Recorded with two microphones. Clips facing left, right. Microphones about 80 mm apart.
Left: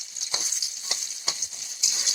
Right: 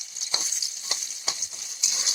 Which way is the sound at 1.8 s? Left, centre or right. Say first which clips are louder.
Right 1 dB; right.